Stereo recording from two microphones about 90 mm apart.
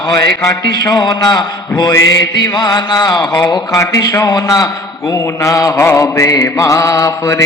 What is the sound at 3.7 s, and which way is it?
A man's voice, 35° left (ahead or behind).